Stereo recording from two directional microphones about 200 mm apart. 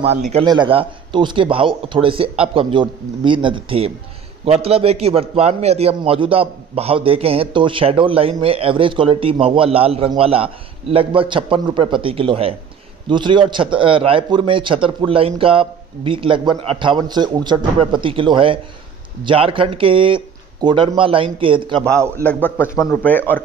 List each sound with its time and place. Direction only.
0.0 s a man's voice: 30° right (ahead or behind)
22.2 s a man's voice: 10° left (ahead or behind)